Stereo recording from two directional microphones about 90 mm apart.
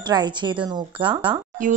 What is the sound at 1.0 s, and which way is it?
Speech, 75° right (ahead or behind).